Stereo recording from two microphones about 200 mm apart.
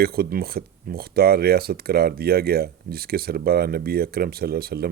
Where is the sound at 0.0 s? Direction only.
50° right (ahead or behind).